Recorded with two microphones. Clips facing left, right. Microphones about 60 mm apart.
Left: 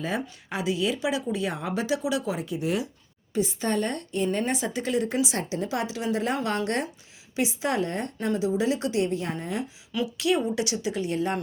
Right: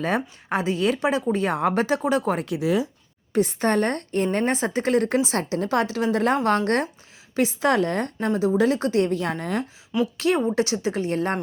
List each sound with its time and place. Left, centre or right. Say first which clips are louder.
0.0 s a woman's voice: right 5 dB; right
8.2 s a woman's voice: right 4 dB; right
10.2 s speech: right 2 dB; right